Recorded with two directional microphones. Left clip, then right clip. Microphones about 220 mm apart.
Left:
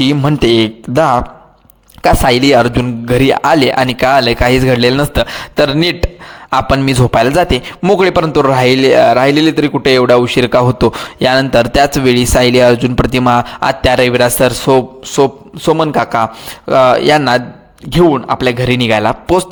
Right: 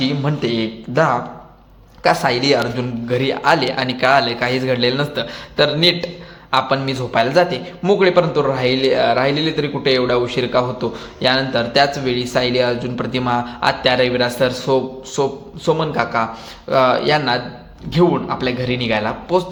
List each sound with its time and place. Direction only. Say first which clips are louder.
0.0 s a man's voice: left 9 dB; 50° left (ahead or behind)